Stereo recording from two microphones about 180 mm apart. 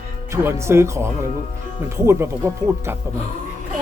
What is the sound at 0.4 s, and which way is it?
Speech, 15° right (ahead or behind).